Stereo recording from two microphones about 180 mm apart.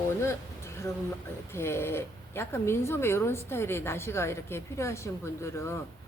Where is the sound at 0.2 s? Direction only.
15° left (ahead or behind).